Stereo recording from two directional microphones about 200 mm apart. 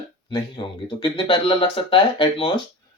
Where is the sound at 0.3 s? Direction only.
25° left (ahead or behind).